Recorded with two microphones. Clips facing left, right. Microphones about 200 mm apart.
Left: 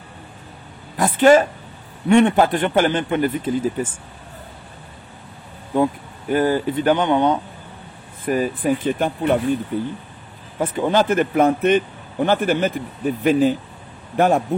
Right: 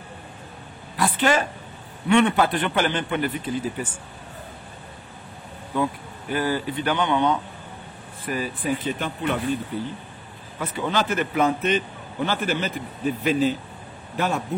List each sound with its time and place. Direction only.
0.9 s a man's voice: 45° left (ahead or behind)
5.7 s a man's voice: 50° left (ahead or behind)